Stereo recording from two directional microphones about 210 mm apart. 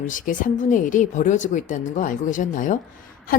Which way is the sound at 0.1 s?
40° left (ahead or behind).